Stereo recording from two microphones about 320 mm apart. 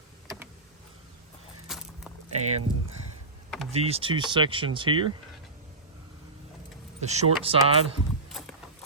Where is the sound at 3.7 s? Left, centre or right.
Centre.